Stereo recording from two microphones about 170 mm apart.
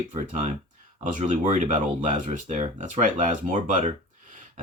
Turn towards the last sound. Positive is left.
turn(degrees=-45)  # may be behind; listen again after turning